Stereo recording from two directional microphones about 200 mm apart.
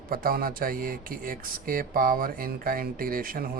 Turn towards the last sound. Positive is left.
turn(degrees=-45)  # may be behind; listen again after turning